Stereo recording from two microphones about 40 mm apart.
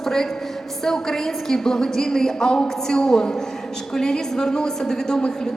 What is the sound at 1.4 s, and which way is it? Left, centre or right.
A woman's voice, centre.